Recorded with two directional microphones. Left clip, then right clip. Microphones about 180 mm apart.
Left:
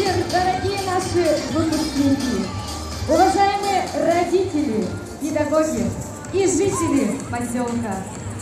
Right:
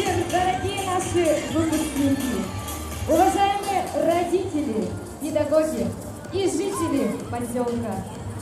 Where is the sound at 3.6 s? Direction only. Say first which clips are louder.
Left 3 dB; 35° right (ahead or behind).